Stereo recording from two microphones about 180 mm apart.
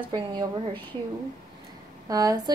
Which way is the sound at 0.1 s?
25° right (ahead or behind).